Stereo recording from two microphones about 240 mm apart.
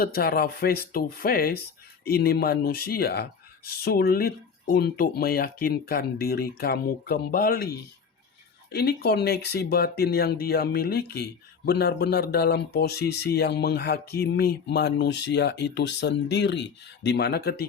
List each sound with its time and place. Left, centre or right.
0.0 s speech: left